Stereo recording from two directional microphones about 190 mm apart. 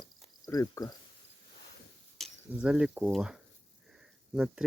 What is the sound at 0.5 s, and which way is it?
Speech, 20° left (ahead or behind).